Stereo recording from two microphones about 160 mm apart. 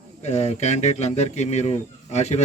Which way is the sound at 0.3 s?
45° left (ahead or behind).